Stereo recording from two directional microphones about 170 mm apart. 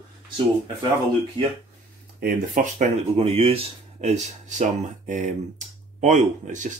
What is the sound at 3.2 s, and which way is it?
Speech, 35° right (ahead or behind).